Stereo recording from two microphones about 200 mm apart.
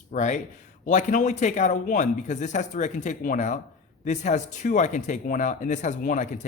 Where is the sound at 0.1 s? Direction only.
35° left (ahead or behind).